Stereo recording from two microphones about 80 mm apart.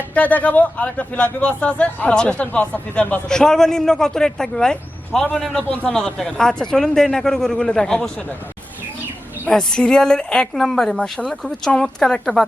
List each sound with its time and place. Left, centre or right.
0.1 s speech: centre
3.2 s speech: centre
9.5 s speech: centre